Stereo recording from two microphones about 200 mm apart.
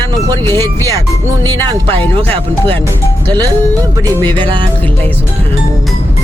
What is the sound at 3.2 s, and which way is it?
Speech, 20° right (ahead or behind).